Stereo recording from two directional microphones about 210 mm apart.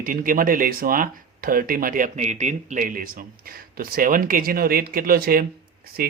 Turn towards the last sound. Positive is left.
turn(degrees=-45)  # may be behind; listen again after turning